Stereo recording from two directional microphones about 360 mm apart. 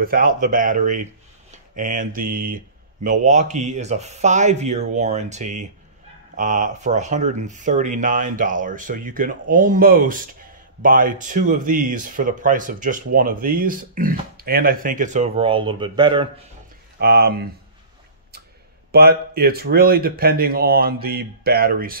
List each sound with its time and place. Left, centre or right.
0.0 s speech: right
17.0 s speech: right
18.9 s speech: right